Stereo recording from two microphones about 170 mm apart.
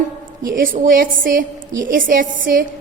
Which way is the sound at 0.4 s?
55° right (ahead or behind).